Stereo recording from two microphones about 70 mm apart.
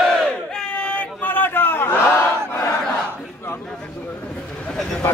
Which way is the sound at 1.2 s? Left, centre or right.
Left.